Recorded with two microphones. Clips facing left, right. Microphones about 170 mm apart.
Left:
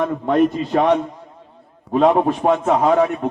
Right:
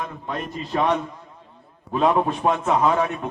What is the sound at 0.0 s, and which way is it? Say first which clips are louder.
A man's voice: left 14 dB; 60° left (ahead or behind).